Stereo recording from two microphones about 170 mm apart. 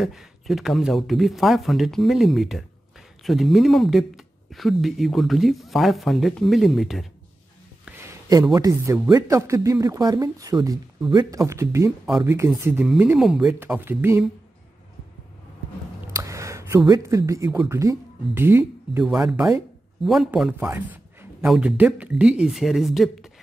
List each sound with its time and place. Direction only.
0.0 s speech: centre (ahead or behind)
7.8 s a sound: 15° right (ahead or behind)
8.5 s speech: 20° right (ahead or behind)
12.1 s speech: centre (ahead or behind)
12.4 s speech: 10° right (ahead or behind)
16.1 s a man's voice: 20° right (ahead or behind); by 23.3 s centre (ahead or behind)